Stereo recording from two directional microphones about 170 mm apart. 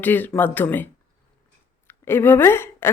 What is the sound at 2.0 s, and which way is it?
Speech, 15° left (ahead or behind).